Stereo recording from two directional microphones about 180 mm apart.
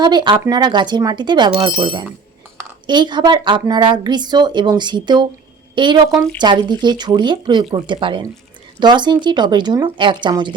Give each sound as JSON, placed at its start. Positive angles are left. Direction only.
{"t": 0.0, "sound": "speech", "side_deg": -25}